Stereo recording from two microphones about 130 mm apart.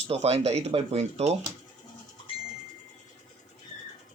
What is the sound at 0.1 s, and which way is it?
Speech, 55° right (ahead or behind).